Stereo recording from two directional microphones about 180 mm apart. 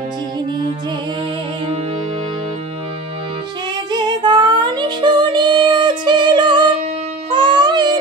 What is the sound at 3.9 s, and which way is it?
Female singing, 25° right (ahead or behind).